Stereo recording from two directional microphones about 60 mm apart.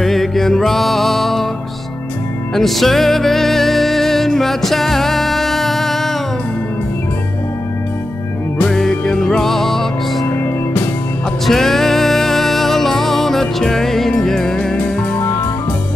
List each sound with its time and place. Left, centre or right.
0.0 s music: centre
2.5 s music: centre
8.7 s music: centre
10.2 s music: left
11.4 s music: centre